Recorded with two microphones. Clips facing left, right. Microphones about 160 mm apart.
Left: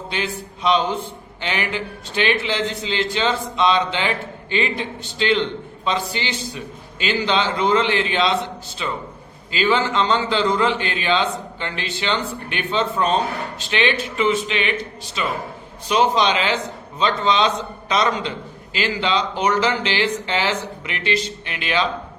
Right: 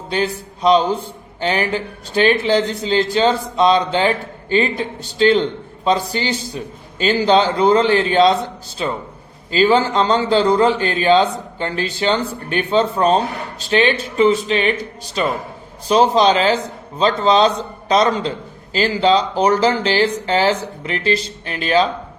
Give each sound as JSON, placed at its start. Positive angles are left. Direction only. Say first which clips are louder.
{"t": 0.1, "sound": "a man's voice", "louder": "right 8 dB", "side_deg": -40}